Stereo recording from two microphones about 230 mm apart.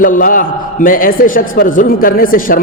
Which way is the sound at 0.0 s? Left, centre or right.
Left.